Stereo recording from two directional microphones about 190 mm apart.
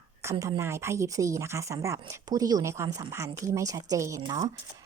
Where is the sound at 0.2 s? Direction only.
15° right (ahead or behind).